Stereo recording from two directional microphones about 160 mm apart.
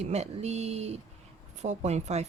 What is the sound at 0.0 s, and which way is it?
Speech, 45° right (ahead or behind).